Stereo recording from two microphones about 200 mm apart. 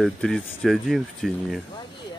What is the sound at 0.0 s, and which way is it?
Speech, centre (ahead or behind).